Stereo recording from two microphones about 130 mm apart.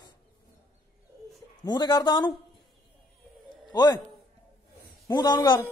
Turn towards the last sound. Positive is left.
turn(degrees=35)  # may be behind; listen again after turning